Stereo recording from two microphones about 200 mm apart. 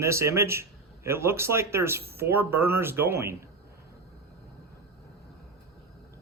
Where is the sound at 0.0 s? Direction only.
15° right (ahead or behind).